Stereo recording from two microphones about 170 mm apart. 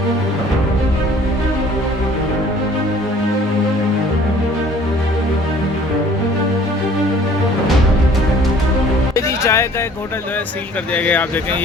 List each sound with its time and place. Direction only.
9.1 s music: 15° left (ahead or behind)
10.9 s speech: 10° left (ahead or behind)